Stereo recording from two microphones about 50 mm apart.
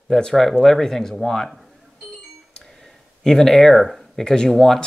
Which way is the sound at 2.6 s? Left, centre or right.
Centre.